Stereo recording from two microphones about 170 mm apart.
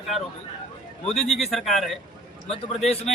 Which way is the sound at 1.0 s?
Centre (ahead or behind).